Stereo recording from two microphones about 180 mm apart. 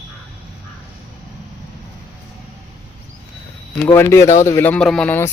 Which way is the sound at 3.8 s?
15° left (ahead or behind).